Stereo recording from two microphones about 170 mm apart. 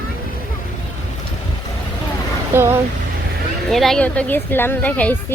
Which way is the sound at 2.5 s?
15° right (ahead or behind).